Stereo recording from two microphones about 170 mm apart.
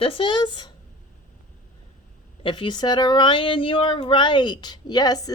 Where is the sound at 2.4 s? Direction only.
30° left (ahead or behind).